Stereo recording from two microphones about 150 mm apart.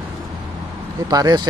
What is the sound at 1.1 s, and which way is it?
Speech, 25° right (ahead or behind).